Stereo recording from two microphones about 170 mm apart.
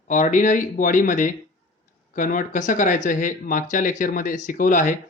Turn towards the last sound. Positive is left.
turn(degrees=50)  # may be behind; listen again after turning